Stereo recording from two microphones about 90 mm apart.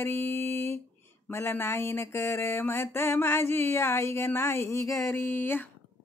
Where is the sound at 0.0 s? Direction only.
25° left (ahead or behind).